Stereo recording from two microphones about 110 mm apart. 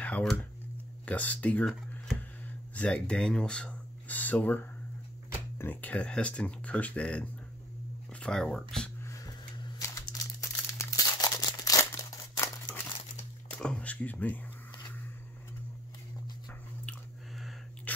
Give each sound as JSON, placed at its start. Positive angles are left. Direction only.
{"t": 0.0, "sound": "speech", "side_deg": 15}
{"t": 2.7, "sound": "speech", "side_deg": 10}
{"t": 9.0, "sound": "a sound", "side_deg": 30}
{"t": 10.7, "sound": "crumpling", "side_deg": 30}
{"t": 12.7, "sound": "crumpling", "side_deg": 40}
{"t": 13.6, "sound": "speech", "side_deg": 10}
{"t": 17.9, "sound": "dog", "side_deg": 15}